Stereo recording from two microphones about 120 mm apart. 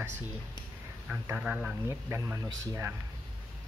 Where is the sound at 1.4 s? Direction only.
10° right (ahead or behind).